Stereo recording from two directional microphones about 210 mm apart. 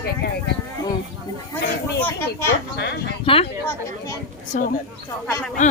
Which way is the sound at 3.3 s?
25° left (ahead or behind).